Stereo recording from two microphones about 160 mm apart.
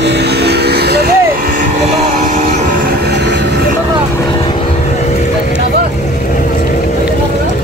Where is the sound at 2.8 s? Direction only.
90° right.